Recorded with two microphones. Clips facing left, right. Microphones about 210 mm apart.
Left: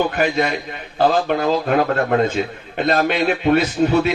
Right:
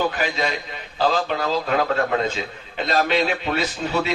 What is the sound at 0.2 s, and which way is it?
A man's voice, 55° left (ahead or behind).